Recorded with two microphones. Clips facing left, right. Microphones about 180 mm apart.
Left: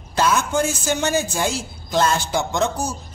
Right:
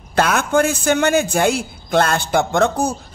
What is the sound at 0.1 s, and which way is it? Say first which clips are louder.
A woman's voice: right 3 dB; 60° right (ahead or behind).